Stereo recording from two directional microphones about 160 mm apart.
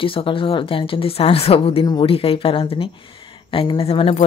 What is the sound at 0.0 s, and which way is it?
A woman's voice, 35° left (ahead or behind).